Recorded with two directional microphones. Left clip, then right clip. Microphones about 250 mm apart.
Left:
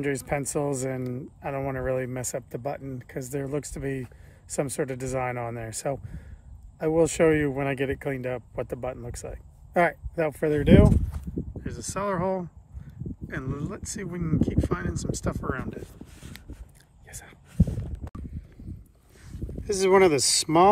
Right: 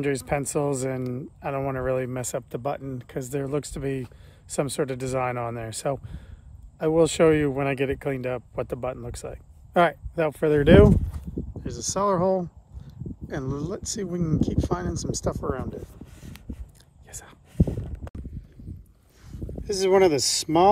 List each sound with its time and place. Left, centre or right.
0.0 s speech: centre
3.3 s speech: centre
10.6 s speech: right
11.6 s speech: centre
17.6 s a sound: right
18.0 s a sound: centre
19.6 s speech: centre